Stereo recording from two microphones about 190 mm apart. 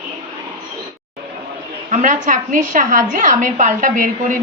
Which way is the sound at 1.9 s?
40° right (ahead or behind).